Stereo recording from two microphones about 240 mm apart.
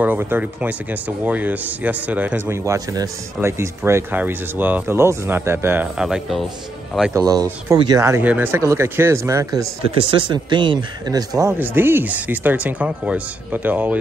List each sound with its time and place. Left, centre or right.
0.0 s speech: centre
7.2 s speech: centre